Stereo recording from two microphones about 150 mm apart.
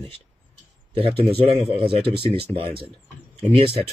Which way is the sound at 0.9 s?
40° right (ahead or behind).